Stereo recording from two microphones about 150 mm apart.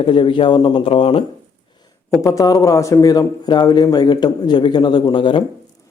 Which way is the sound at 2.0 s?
20° left (ahead or behind).